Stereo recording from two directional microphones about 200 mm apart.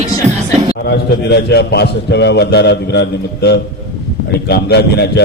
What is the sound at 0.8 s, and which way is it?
A man's voice, 55° left (ahead or behind).